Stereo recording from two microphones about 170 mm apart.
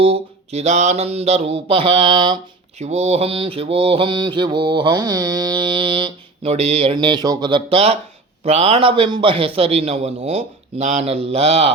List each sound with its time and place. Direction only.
0.0 s a man's voice: 35° right (ahead or behind)
2.7 s mantra: 40° right (ahead or behind)
8.4 s a man's voice: 35° right (ahead or behind)